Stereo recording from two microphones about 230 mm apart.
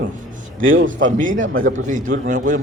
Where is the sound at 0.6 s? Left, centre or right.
Right.